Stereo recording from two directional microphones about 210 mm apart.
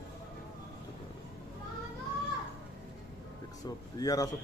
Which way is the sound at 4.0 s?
15° left (ahead or behind).